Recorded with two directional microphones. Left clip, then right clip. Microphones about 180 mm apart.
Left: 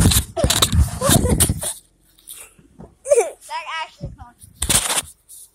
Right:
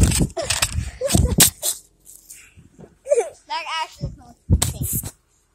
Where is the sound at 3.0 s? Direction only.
45° left (ahead or behind).